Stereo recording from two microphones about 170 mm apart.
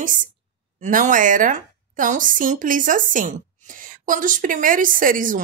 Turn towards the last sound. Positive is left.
turn(degrees=-55)  # may be behind; listen again after turning